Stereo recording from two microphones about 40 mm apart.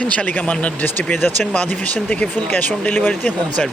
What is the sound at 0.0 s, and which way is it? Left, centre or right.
Speech, left.